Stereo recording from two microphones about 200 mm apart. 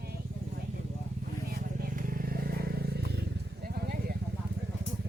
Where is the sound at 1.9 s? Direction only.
45° right (ahead or behind).